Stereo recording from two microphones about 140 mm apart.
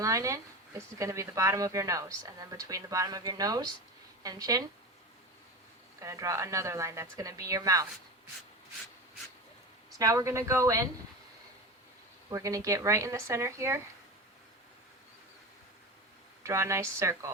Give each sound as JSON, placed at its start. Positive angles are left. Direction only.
{"t": 0.0, "sound": "speech", "side_deg": -20}
{"t": 6.0, "sound": "speech", "side_deg": -20}
{"t": 10.0, "sound": "speech", "side_deg": -25}
{"t": 12.3, "sound": "speech", "side_deg": -25}
{"t": 16.4, "sound": "speech", "side_deg": -20}